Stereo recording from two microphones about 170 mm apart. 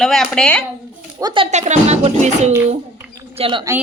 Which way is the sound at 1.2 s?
25° right (ahead or behind).